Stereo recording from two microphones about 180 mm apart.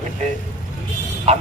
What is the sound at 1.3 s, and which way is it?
Speech, 35° right (ahead or behind).